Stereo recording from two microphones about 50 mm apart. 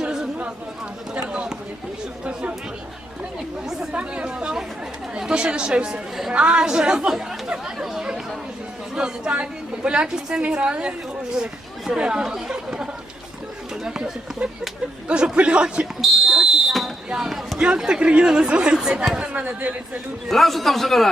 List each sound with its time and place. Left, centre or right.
0.0 s chatter: centre
1.1 s a sound: right
2.2 s chatter: right
3.9 s chatter: right
5.1 s a man's voice: centre
7.1 s chatter: centre
9.0 s a woman's voice: centre
13.8 s chatter: centre
15.0 s a man's voice: right
16.0 s fire alarm: centre
17.2 s speech: centre
19.2 s speech: right
20.2 s a man's voice: centre